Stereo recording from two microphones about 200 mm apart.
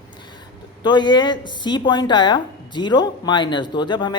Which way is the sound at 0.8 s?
20° left (ahead or behind).